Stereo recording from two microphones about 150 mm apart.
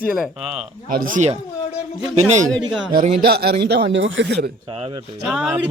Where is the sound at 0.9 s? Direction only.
60° right (ahead or behind).